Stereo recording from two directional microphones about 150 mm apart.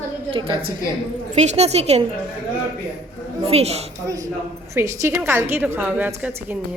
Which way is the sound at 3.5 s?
45° right (ahead or behind).